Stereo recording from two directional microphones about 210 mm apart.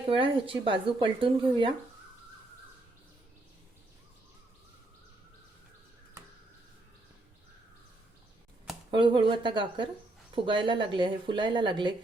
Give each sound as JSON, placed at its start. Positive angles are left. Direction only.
{"t": 0.1, "sound": "speech", "side_deg": -25}
{"t": 8.9, "sound": "speech", "side_deg": -20}